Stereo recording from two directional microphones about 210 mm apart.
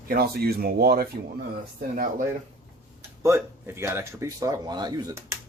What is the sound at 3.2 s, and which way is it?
Speech, 15° right (ahead or behind).